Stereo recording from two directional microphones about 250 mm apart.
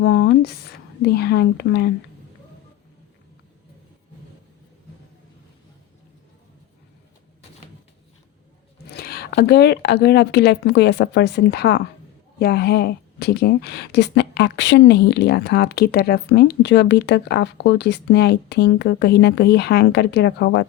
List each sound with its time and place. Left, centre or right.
0.0 s speech: left
9.0 s a woman's voice: left